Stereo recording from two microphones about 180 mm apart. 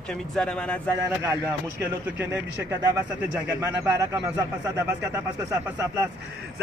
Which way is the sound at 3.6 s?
15° right (ahead or behind).